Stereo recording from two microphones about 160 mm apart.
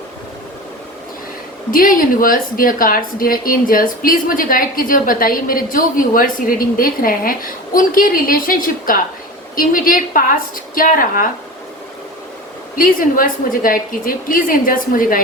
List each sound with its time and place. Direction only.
1.7 s speech: 60° left (ahead or behind)
12.7 s speech: 60° left (ahead or behind)